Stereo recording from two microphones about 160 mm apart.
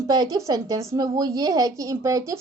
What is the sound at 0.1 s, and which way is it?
A woman's voice, 25° right (ahead or behind).